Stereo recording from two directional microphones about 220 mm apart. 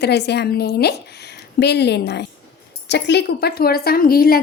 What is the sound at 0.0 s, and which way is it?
A woman's voice, 50° left (ahead or behind).